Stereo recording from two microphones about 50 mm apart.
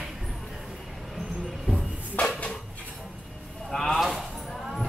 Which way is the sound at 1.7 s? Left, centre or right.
Centre.